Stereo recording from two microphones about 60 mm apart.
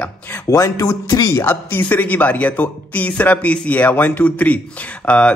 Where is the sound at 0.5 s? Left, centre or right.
Left.